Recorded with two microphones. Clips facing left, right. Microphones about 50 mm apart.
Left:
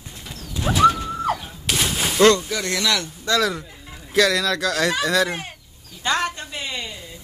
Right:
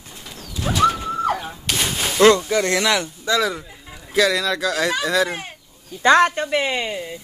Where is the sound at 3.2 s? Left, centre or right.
Centre.